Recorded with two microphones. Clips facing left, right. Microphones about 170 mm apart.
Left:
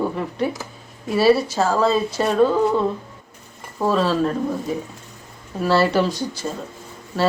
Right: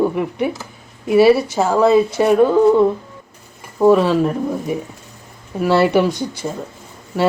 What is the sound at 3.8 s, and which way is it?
Speech, 20° right (ahead or behind).